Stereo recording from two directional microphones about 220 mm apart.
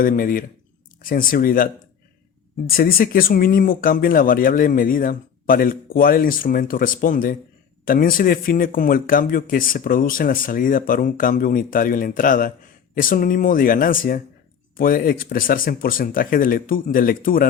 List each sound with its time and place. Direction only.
0.0 s speech: 40° left (ahead or behind)